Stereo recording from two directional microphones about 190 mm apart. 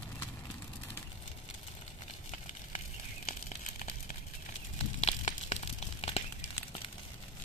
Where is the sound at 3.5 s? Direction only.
35° left (ahead or behind).